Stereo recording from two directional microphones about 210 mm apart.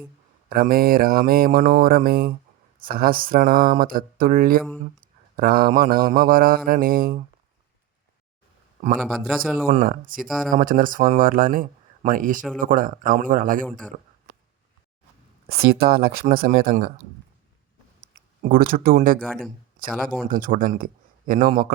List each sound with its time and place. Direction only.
0.5 s mantra: 45° right (ahead or behind)
9.0 s a man's voice: centre (ahead or behind)
9.6 s speech: 40° right (ahead or behind)
10.2 s a man's voice: centre (ahead or behind)
10.5 s speech: 40° right (ahead or behind)
13.7 s a man's voice: 5° left (ahead or behind)
15.4 s mantra: 45° right (ahead or behind)
18.1 s speech: 40° right (ahead or behind)
19.2 s a man's voice: 5° left (ahead or behind)
20.3 s speech: 40° right (ahead or behind)